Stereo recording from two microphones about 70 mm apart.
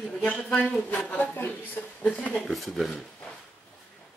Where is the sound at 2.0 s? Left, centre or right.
Centre.